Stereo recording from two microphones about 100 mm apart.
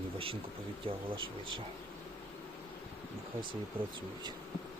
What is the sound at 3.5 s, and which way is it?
Speech, 50° right (ahead or behind).